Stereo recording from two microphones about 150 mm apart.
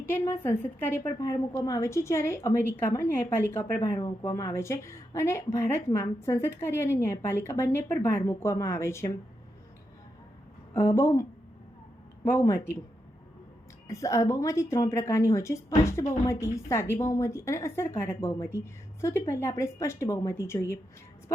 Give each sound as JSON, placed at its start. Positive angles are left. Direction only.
{"t": 0.0, "sound": "a woman's voice", "side_deg": 15}
{"t": 10.8, "sound": "a woman's voice", "side_deg": 15}
{"t": 13.8, "sound": "a woman's voice", "side_deg": 20}